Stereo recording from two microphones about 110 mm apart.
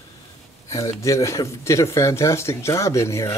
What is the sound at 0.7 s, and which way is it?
Speech, 30° left (ahead or behind).